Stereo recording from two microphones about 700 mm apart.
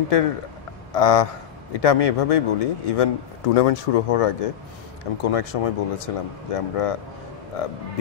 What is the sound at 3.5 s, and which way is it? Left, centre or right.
Speech, left.